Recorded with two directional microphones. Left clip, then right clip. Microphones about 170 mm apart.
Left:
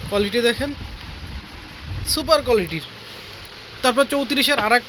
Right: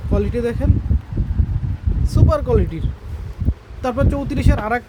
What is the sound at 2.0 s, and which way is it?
Speech, 25° right (ahead or behind).